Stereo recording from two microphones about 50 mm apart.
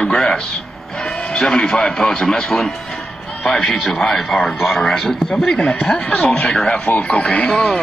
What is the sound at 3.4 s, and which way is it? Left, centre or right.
Speech, centre.